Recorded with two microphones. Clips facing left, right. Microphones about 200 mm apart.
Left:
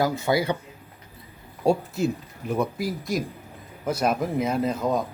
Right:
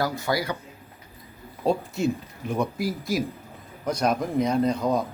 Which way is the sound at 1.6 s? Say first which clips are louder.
Left 1 dB; 10° left (ahead or behind).